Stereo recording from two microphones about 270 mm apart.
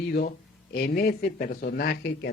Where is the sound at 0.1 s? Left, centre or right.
Left.